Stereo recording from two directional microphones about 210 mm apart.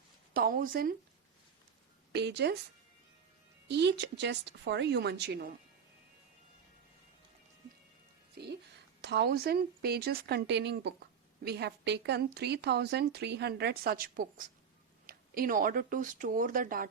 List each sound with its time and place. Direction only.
0.3 s speech: 45° right (ahead or behind)
2.1 s a woman's voice: 50° right (ahead or behind)
3.7 s a woman's voice: 55° right (ahead or behind)
8.4 s a sound: 50° right (ahead or behind)
9.0 s a woman's voice: 55° right (ahead or behind)